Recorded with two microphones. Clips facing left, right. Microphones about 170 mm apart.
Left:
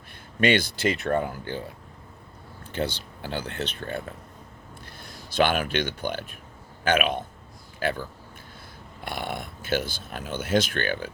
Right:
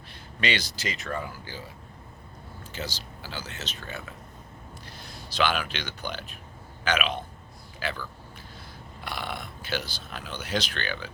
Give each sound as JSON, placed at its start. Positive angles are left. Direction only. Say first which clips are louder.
{"t": 0.3, "sound": "speech", "louder": "left 8 dB", "side_deg": 50}
{"t": 2.7, "sound": "a man's voice", "louder": "left 8 dB", "side_deg": 60}
{"t": 9.0, "sound": "speech", "louder": "left 3 dB", "side_deg": 50}